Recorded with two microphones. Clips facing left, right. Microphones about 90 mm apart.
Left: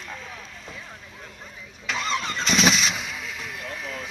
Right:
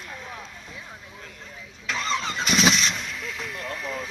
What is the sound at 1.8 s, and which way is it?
Vehicle, 5° left (ahead or behind).